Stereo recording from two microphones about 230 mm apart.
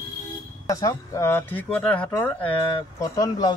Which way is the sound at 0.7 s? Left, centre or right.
Centre.